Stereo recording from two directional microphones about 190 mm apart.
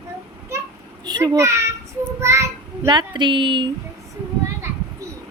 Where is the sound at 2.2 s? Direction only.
15° right (ahead or behind).